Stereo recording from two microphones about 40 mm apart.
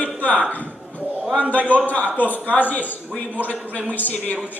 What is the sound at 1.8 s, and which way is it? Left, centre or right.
A man's voice, left.